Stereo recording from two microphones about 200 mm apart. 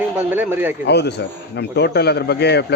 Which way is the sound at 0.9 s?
55° left (ahead or behind).